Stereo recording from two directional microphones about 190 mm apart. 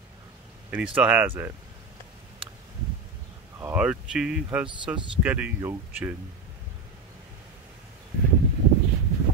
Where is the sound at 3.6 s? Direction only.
10° right (ahead or behind).